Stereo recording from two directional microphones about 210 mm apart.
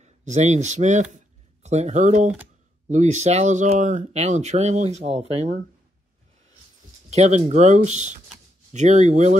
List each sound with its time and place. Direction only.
0.0 s speech: 35° right (ahead or behind)
1.1 s a sound: 30° right (ahead or behind)
2.9 s speech: 35° right (ahead or behind)
7.1 s speech: 35° right (ahead or behind)